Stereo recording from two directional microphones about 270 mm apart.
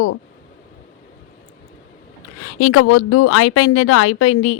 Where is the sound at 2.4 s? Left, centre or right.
Left.